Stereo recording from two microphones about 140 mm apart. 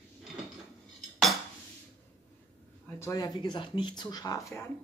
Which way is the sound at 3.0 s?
25° left (ahead or behind).